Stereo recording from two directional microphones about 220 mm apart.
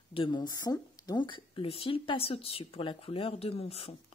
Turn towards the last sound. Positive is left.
turn(degrees=25)  # may be behind; listen again after turning